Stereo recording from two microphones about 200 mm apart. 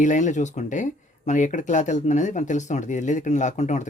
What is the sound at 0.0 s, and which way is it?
Speech, 40° left (ahead or behind).